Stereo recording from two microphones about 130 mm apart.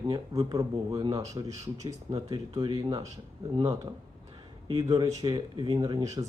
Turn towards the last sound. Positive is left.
turn(degrees=-30)  # may be behind; listen again after turning